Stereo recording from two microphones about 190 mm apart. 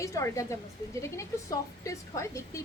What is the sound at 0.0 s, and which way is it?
A woman's voice, 15° left (ahead or behind).